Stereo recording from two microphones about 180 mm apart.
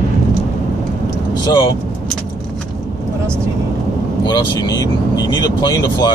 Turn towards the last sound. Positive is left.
turn(degrees=20)  # may be behind; listen again after turning